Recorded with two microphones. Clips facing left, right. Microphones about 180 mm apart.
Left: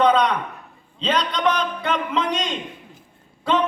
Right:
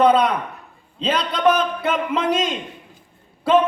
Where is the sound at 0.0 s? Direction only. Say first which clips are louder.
Right 2 dB; 5° right (ahead or behind).